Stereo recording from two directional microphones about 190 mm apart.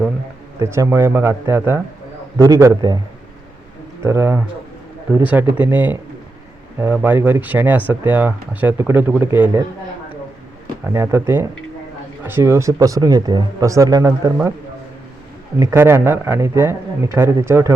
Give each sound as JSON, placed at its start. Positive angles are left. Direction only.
{"t": 0.6, "sound": "speech", "side_deg": -15}
{"t": 4.0, "sound": "speech", "side_deg": -15}
{"t": 10.9, "sound": "speech", "side_deg": -15}
{"t": 15.5, "sound": "speech", "side_deg": -15}